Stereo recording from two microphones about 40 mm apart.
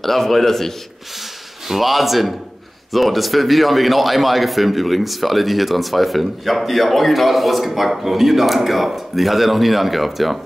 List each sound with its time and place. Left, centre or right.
0.0 s a man's voice: centre
1.7 s a man's voice: centre